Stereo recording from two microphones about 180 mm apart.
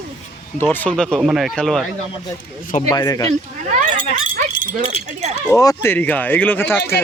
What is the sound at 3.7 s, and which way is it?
Speech, 40° right (ahead or behind).